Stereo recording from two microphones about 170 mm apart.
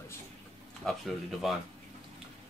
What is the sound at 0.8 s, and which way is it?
Speech, centre (ahead or behind).